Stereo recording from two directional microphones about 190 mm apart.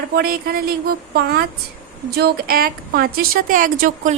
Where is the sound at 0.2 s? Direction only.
50° right (ahead or behind).